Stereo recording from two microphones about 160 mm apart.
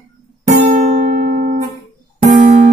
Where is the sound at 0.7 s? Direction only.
60° right (ahead or behind).